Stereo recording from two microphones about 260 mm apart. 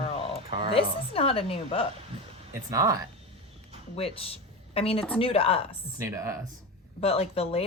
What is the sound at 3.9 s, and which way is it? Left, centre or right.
A woman's voice, left.